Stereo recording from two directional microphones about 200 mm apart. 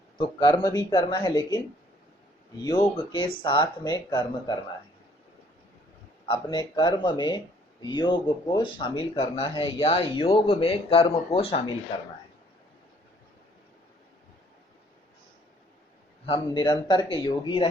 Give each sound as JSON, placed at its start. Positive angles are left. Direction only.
{"t": 0.2, "sound": "speech", "side_deg": 25}
{"t": 2.6, "sound": "speech", "side_deg": 20}
{"t": 6.2, "sound": "speech", "side_deg": 25}
{"t": 16.2, "sound": "speech", "side_deg": 25}